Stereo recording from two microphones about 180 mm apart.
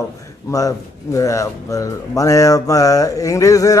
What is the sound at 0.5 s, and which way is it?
Speech, 20° left (ahead or behind).